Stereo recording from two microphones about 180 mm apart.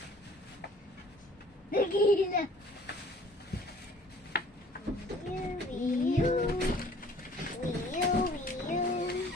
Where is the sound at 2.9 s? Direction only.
70° left (ahead or behind).